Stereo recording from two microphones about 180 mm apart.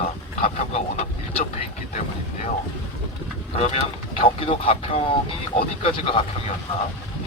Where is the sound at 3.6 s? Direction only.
35° left (ahead or behind).